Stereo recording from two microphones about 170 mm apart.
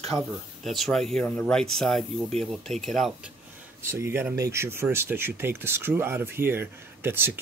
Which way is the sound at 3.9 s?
15° right (ahead or behind).